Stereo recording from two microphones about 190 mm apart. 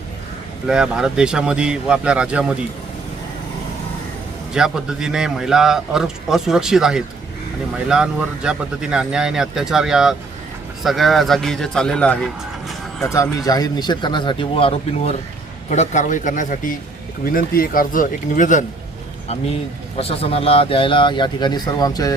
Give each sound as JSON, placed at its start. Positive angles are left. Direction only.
{"t": 0.7, "sound": "a man's voice", "side_deg": -5}
{"t": 4.5, "sound": "a man's voice", "side_deg": -5}
{"t": 13.4, "sound": "speech", "side_deg": 20}
{"t": 20.0, "sound": "speech", "side_deg": 30}